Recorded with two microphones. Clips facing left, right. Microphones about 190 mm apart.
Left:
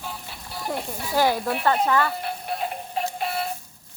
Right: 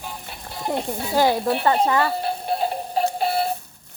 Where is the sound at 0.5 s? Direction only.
25° right (ahead or behind).